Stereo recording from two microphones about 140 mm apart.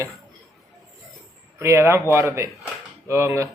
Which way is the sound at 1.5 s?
20° right (ahead or behind).